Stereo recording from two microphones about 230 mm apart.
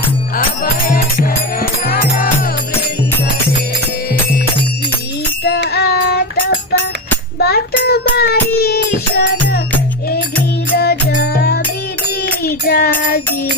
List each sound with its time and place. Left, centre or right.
0.4 s music: left
5.4 s child singing: left
7.3 s child singing: left
10.8 s music: left
12.4 s child singing: left